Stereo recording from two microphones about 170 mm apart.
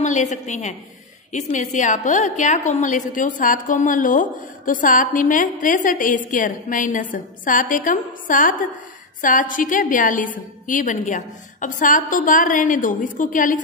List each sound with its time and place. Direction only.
0.0 s a woman's voice: 45° left (ahead or behind)